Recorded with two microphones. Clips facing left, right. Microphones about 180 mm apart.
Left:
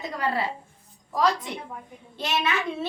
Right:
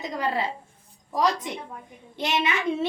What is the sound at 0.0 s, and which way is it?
A child's voice, 20° right (ahead or behind).